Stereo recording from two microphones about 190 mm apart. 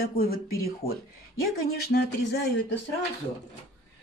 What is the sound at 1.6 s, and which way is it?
Speech, 55° left (ahead or behind).